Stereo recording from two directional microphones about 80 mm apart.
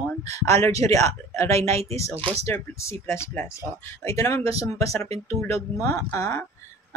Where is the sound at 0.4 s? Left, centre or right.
Left.